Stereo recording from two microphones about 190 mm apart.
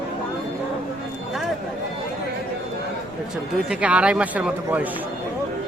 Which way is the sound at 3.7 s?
5° right (ahead or behind).